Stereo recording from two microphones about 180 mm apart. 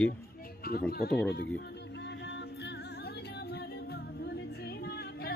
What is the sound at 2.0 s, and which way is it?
Music, 70° left (ahead or behind).